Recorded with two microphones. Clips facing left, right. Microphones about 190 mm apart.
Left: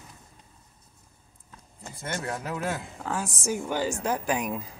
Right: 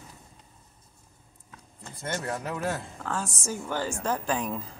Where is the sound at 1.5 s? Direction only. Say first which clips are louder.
Left 2 dB; 5° left (ahead or behind).